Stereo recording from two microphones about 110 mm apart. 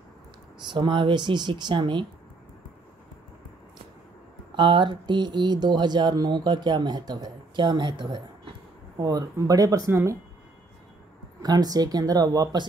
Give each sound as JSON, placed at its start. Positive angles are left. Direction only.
{"t": 0.7, "sound": "speech", "side_deg": -45}
{"t": 4.6, "sound": "speech", "side_deg": -45}
{"t": 11.4, "sound": "speech", "side_deg": -35}